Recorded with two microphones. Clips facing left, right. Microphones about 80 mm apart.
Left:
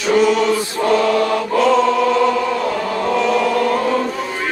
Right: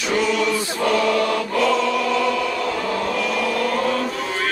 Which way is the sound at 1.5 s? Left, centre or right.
Left.